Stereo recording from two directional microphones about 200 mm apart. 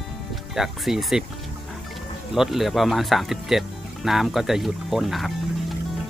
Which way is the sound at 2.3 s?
Centre (ahead or behind).